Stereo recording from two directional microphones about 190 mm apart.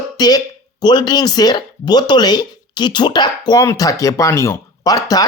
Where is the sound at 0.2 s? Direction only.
20° left (ahead or behind).